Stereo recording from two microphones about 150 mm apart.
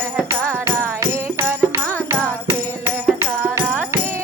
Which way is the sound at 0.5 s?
20° right (ahead or behind).